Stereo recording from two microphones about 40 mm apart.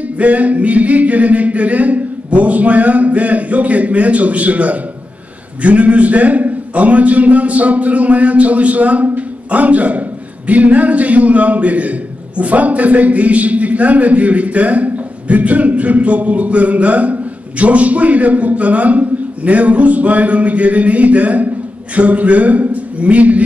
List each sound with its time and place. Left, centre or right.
0.2 s a man's voice: right